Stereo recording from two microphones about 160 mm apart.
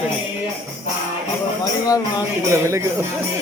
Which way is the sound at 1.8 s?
20° left (ahead or behind).